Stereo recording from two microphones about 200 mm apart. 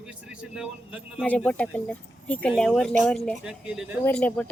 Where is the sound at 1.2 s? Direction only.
5° left (ahead or behind).